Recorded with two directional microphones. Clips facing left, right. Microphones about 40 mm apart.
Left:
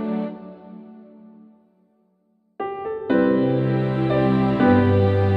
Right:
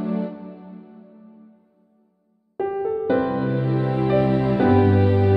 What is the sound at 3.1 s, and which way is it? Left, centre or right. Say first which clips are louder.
Music: left 6 dB; left.